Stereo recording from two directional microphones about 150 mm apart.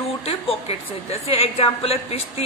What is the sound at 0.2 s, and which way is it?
Speech, 40° left (ahead or behind).